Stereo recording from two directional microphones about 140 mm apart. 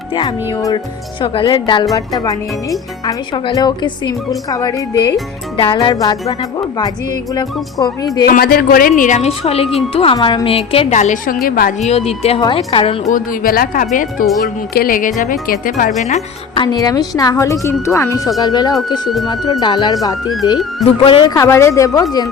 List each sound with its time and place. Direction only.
0.1 s speech: 35° left (ahead or behind)
5.5 s speech: 35° left (ahead or behind)
8.3 s a woman's voice: 90° left
11.8 s speech: 50° left (ahead or behind)
13.1 s a woman's voice: 80° left
14.7 s a woman's voice: 90° left
16.6 s speech: 25° left (ahead or behind)
21.3 s speech: 20° left (ahead or behind)